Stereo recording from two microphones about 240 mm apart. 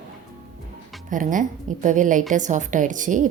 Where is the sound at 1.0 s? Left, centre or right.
Right.